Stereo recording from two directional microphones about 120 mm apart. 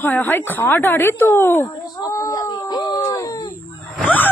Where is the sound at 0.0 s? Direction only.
15° left (ahead or behind); by 3.2 s 40° left (ahead or behind).